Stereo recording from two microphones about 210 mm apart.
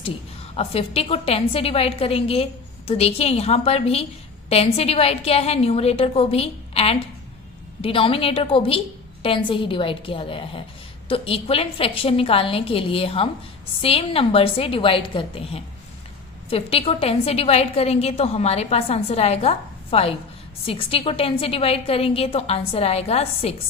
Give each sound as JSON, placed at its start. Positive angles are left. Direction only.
{"t": 0.5, "sound": "a woman's voice", "side_deg": 30}